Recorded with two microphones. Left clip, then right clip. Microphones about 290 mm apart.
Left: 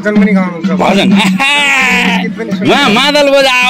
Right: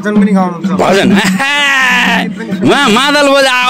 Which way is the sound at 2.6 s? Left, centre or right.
Right.